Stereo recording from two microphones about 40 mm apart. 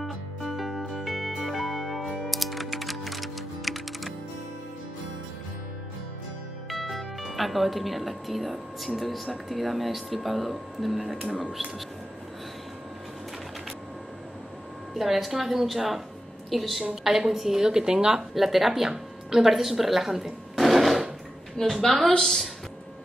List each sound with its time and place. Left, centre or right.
0.0 s music: centre
6.7 s speech: centre
15.0 s a woman's voice: centre
18.3 s speech: centre
21.6 s a woman's voice: centre
22.2 s a woman's voice: centre